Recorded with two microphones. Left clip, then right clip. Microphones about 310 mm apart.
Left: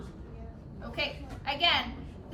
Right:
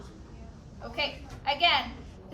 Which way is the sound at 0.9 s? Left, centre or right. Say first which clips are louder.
Right 2 dB; right.